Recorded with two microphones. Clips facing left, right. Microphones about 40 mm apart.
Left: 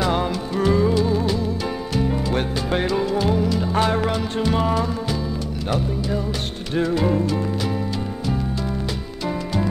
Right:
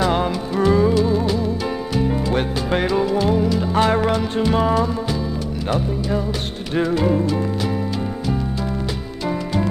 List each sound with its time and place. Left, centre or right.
0.6 s music: centre
2.7 s music: centre
3.0 s music: centre
6.7 s music: centre